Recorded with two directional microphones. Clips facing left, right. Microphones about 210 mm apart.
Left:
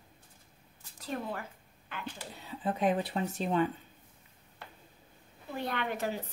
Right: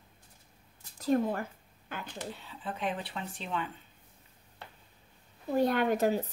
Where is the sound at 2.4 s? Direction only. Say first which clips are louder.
Left 9 dB; 45° left (ahead or behind).